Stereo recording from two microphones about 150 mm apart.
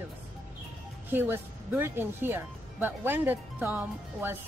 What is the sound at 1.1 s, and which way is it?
Speech, 15° right (ahead or behind).